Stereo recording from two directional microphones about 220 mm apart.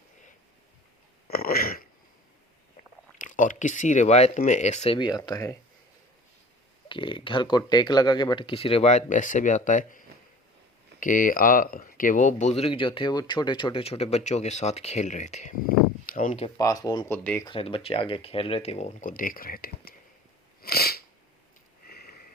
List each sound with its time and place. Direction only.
1.3 s a sound: 45° left (ahead or behind)
3.2 s speech: 35° left (ahead or behind); by 5.5 s 15° left (ahead or behind)
6.8 s speech: 20° left (ahead or behind)
11.0 s speech: 40° left (ahead or behind)
16.6 s speech: 15° left (ahead or behind); by 19.9 s 40° left (ahead or behind)
20.6 s sneeze: 45° left (ahead or behind)
21.8 s sniff: 45° left (ahead or behind)